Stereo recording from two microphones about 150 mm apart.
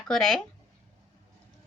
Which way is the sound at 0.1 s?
Centre (ahead or behind).